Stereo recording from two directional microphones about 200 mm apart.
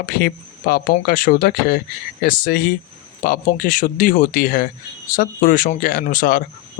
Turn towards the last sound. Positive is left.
turn(degrees=45)  # may be behind; listen again after turning